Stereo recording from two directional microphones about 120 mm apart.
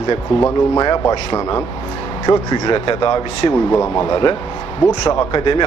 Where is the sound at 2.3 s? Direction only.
35° left (ahead or behind).